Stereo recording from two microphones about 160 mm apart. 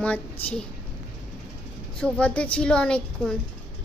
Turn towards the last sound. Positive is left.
turn(degrees=5)  # may be behind; listen again after turning